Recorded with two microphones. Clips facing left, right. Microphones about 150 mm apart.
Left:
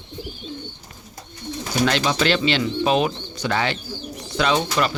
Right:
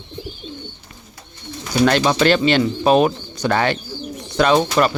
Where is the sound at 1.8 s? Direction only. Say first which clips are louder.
Right 6 dB; 50° right (ahead or behind).